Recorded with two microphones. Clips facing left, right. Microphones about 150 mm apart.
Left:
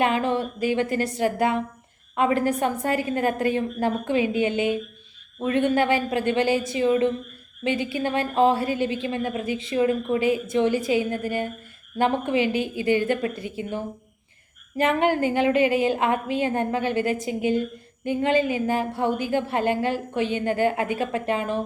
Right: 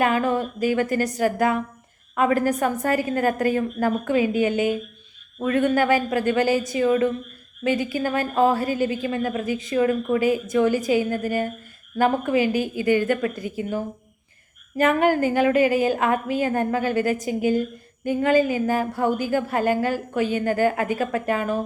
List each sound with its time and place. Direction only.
0.0 s a woman's voice: 25° left (ahead or behind)
14.8 s a woman's voice: 25° left (ahead or behind)